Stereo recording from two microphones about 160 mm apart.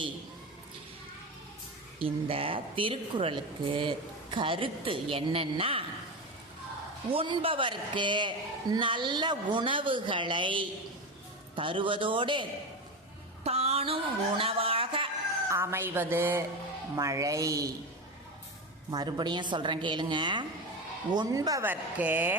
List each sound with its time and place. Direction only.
2.0 s a woman's voice: 35° right (ahead or behind)
7.1 s a woman's voice: 35° right (ahead or behind)
15.4 s a woman's voice: 15° right (ahead or behind)
18.9 s a woman's voice: 25° right (ahead or behind)
21.7 s a woman's voice: 10° right (ahead or behind)